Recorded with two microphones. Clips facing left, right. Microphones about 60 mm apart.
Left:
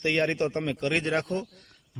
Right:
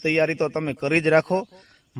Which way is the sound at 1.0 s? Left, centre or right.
Right.